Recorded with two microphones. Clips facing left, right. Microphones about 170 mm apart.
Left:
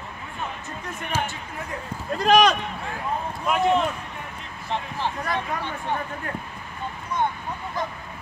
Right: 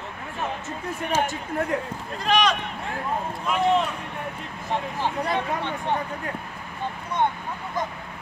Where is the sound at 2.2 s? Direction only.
45° left (ahead or behind).